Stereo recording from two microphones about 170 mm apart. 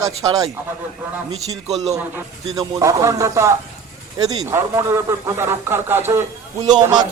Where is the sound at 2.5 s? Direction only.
20° right (ahead or behind).